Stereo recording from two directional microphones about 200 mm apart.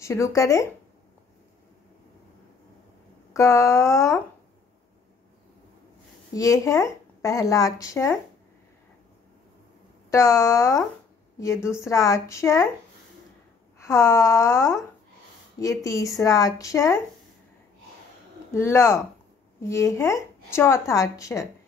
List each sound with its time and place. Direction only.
0.0 s speech: 15° left (ahead or behind)
3.3 s speech: 15° left (ahead or behind)
6.3 s speech: 15° left (ahead or behind)
10.1 s speech: 15° left (ahead or behind)
13.7 s speech: 15° left (ahead or behind)
18.5 s speech: 15° left (ahead or behind)